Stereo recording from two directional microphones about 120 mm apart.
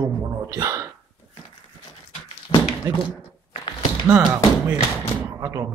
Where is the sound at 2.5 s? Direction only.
40° left (ahead or behind).